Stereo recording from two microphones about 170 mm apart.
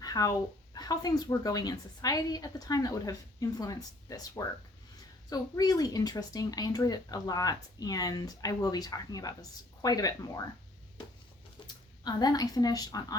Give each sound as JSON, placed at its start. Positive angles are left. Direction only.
{"t": 0.0, "sound": "speech", "side_deg": 20}
{"t": 11.7, "sound": "speech", "side_deg": 25}